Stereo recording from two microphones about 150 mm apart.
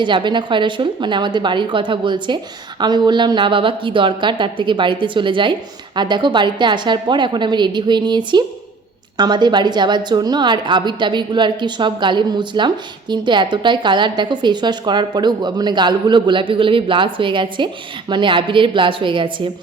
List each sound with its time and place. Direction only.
0.0 s a woman's voice: 30° right (ahead or behind)